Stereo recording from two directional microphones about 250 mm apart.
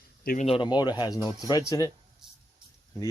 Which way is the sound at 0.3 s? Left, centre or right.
Left.